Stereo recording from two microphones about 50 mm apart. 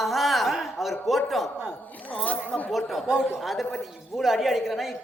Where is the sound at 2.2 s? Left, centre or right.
Left.